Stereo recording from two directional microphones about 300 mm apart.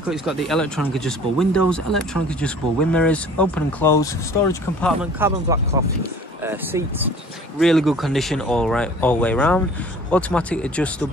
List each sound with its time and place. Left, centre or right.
0.0 s speech: centre
5.2 s speech: centre